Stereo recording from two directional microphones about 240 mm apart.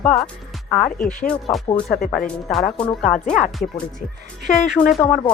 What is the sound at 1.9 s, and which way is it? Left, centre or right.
Music, left.